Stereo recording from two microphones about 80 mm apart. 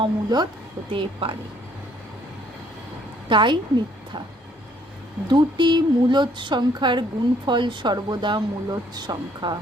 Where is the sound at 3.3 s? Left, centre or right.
Right.